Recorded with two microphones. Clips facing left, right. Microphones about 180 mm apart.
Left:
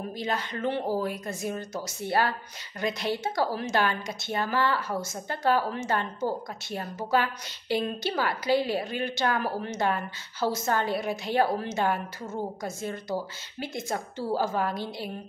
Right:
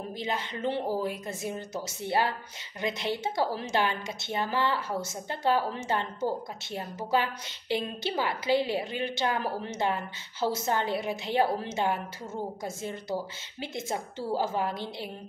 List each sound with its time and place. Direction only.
0.2 s a woman's voice: 20° right (ahead or behind)
7.1 s a woman's voice: 20° right (ahead or behind)
13.6 s a woman's voice: 20° right (ahead or behind)